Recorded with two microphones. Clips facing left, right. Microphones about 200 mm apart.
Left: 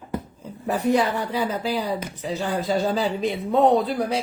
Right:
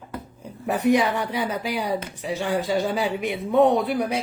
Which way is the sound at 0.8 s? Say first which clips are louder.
Right 1 dB; 15° right (ahead or behind).